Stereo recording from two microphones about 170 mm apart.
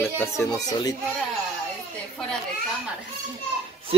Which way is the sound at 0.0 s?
15° left (ahead or behind).